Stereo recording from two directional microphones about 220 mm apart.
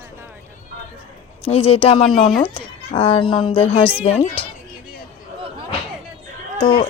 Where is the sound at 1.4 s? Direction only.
25° left (ahead or behind).